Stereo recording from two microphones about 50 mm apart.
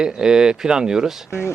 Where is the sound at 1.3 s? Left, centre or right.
Left.